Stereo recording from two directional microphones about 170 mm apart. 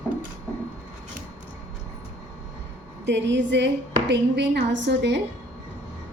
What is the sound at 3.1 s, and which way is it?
A woman's voice, 90° right.